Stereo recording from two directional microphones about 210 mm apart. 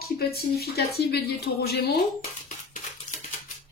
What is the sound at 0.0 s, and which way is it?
Speech, 45° left (ahead or behind).